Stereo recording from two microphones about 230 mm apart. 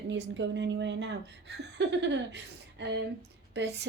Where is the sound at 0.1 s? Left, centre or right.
Right.